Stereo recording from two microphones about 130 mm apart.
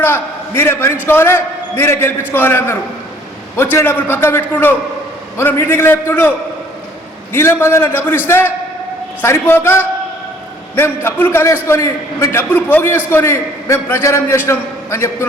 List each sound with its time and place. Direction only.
0.0 s a man's voice: 15° left (ahead or behind)
7.3 s a man's voice: 20° left (ahead or behind)